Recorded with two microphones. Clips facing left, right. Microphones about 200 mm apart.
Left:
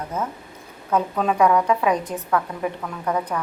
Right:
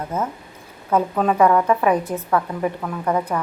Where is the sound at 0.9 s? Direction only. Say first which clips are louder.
Right 3 dB; 5° right (ahead or behind).